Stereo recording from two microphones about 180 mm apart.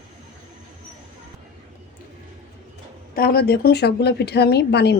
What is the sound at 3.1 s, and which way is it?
Speech, 55° left (ahead or behind).